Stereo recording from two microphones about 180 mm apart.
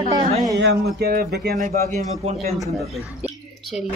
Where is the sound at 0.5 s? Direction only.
70° right (ahead or behind).